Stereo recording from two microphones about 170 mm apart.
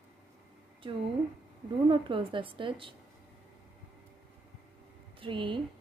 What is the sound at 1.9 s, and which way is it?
Speech, 30° right (ahead or behind).